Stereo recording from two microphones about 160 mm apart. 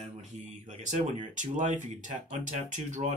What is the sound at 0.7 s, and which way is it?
Speech, 50° right (ahead or behind).